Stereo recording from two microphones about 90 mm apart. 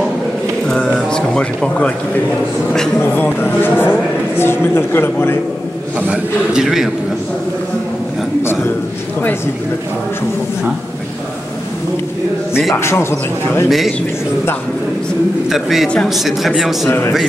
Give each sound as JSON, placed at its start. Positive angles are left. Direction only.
{"t": 0.7, "sound": "a sound", "side_deg": 5}
{"t": 3.0, "sound": "a man's voice", "side_deg": 25}
{"t": 5.9, "sound": "a man's voice", "side_deg": -10}
{"t": 8.4, "sound": "a sound", "side_deg": 25}
{"t": 12.7, "sound": "a man's voice", "side_deg": 30}
{"t": 13.7, "sound": "a man's voice", "side_deg": 0}
{"t": 15.5, "sound": "a man's voice", "side_deg": -5}
{"t": 16.8, "sound": "a man's voice", "side_deg": 30}